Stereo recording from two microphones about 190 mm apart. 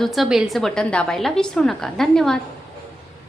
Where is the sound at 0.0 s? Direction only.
Centre (ahead or behind).